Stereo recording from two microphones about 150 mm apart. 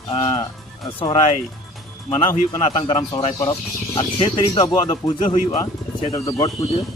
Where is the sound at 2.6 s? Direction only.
45° left (ahead or behind).